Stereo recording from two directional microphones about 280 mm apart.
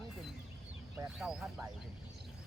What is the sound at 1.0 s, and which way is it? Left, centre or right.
Speech, centre.